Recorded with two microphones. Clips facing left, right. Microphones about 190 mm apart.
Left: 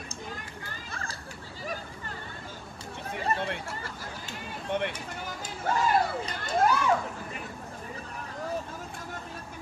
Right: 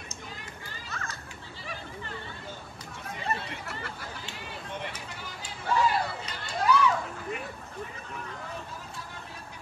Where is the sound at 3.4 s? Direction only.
55° left (ahead or behind).